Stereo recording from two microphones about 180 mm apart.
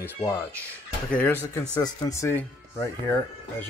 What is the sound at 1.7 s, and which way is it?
Speech, 20° left (ahead or behind).